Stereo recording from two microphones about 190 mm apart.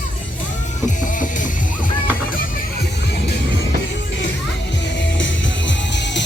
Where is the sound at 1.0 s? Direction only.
45° left (ahead or behind).